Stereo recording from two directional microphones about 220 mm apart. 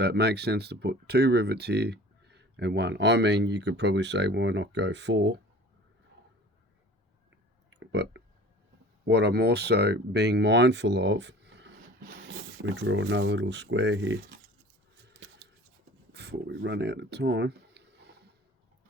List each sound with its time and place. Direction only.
0.0 s speech: 50° right (ahead or behind)
7.7 s a sound: 55° right (ahead or behind)
9.0 s speech: 50° right (ahead or behind)
16.1 s speech: 50° right (ahead or behind)